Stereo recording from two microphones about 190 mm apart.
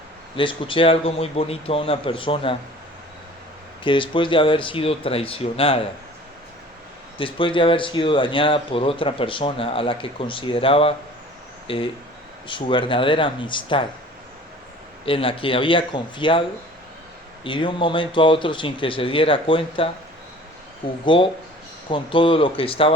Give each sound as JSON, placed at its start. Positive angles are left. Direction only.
{"t": 0.3, "sound": "speech", "side_deg": 25}
{"t": 3.8, "sound": "speech", "side_deg": 25}
{"t": 7.2, "sound": "speech", "side_deg": 25}
{"t": 15.0, "sound": "speech", "side_deg": 30}
{"t": 17.4, "sound": "speech", "side_deg": 25}
{"t": 21.0, "sound": "speech", "side_deg": 25}